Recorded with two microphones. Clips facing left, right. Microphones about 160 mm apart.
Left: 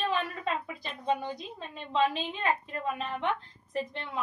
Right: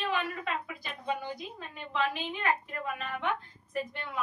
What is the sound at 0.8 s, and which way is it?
A woman's voice, 30° left (ahead or behind).